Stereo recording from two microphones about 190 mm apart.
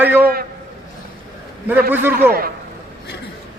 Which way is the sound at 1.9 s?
10° right (ahead or behind).